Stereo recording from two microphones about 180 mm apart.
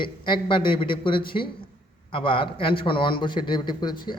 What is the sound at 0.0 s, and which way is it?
A man's voice, 25° left (ahead or behind).